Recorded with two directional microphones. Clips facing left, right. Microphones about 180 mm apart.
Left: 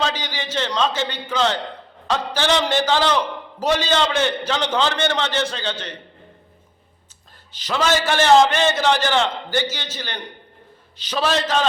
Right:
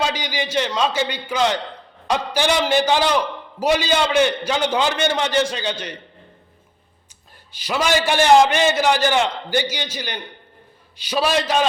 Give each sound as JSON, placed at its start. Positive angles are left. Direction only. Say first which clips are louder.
{"t": 0.0, "sound": "a man's voice", "louder": "right 2 dB", "side_deg": -10}
{"t": 7.5, "sound": "a man's voice", "louder": "even", "side_deg": -10}